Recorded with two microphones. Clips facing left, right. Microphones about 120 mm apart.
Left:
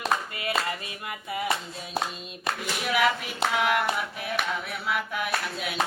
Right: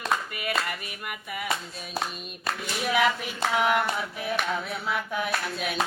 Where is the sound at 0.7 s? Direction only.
25° left (ahead or behind).